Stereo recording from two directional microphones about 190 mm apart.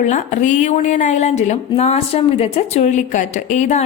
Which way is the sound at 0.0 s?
40° left (ahead or behind).